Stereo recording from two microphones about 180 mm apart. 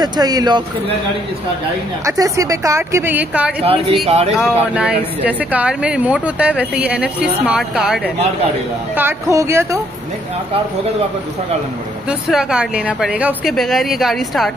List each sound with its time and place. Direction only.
0.0 s speech: 20° right (ahead or behind)
2.0 s speech: 20° right (ahead or behind)
3.6 s speech: 30° right (ahead or behind)
4.4 s speech: 5° right (ahead or behind)
8.9 s speech: 15° right (ahead or behind)
12.1 s speech: 5° right (ahead or behind)